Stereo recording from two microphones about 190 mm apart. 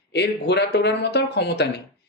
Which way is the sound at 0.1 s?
60° left (ahead or behind).